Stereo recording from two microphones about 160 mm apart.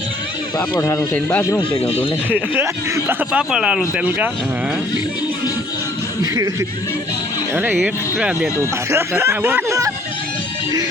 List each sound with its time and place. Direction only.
0.7 s speech: 20° left (ahead or behind)
1.9 s speech: 35° left (ahead or behind)
2.6 s speech: 15° right (ahead or behind)
6.3 s speech: 20° right (ahead or behind)